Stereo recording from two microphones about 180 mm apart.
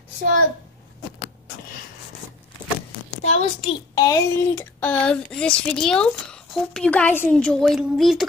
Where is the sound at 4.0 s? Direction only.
20° left (ahead or behind).